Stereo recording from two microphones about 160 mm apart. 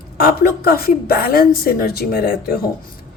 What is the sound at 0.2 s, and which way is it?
A woman's voice, 70° left (ahead or behind).